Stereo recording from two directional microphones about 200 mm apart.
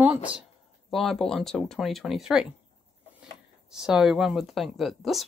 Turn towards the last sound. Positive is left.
turn(degrees=0)  # may be behind; listen again after turning